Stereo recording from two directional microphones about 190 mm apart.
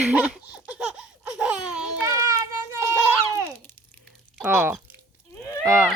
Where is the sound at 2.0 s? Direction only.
15° right (ahead or behind).